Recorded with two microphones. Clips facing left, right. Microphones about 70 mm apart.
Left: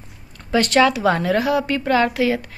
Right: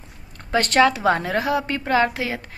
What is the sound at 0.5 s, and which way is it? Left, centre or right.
A woman's voice, right.